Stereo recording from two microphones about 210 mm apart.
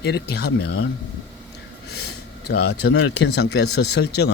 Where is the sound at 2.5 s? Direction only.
55° left (ahead or behind).